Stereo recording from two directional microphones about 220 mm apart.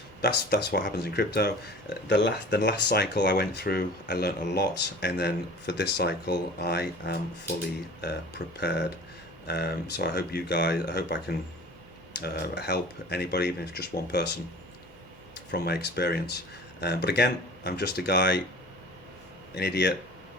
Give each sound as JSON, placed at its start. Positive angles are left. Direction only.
{"t": 0.2, "sound": "speech", "side_deg": 45}
{"t": 15.5, "sound": "speech", "side_deg": 45}
{"t": 19.5, "sound": "speech", "side_deg": 45}